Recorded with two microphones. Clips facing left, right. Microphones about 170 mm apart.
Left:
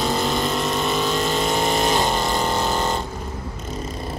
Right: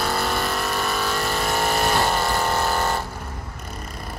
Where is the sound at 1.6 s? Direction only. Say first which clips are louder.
Even; 20° left (ahead or behind).